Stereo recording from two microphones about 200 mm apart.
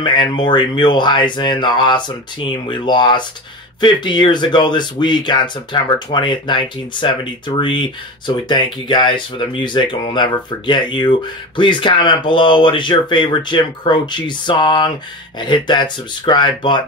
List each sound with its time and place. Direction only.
0.0 s speech: 20° left (ahead or behind)